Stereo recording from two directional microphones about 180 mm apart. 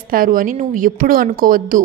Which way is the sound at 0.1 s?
50° right (ahead or behind).